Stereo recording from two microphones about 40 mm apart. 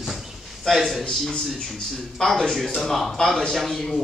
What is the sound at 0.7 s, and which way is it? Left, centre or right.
Speech, centre.